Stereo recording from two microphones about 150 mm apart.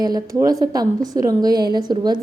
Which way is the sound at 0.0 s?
25° right (ahead or behind).